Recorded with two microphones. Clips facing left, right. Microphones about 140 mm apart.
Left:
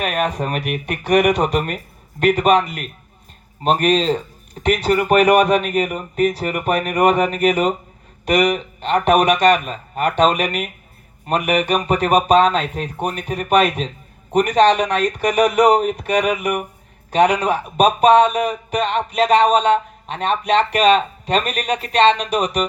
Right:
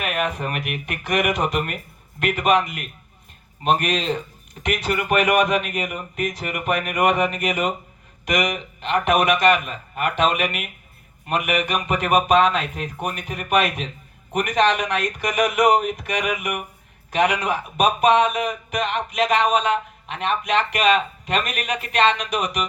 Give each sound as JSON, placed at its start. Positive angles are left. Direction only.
{"t": 0.0, "sound": "speech", "side_deg": 35}